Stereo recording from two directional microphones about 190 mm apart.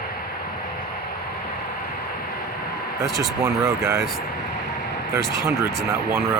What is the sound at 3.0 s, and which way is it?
Speech, 15° right (ahead or behind).